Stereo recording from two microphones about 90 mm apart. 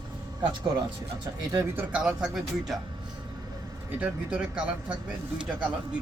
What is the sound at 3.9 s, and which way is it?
Speech, 15° right (ahead or behind).